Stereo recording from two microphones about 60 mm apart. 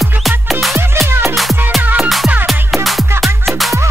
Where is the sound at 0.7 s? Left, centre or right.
Right.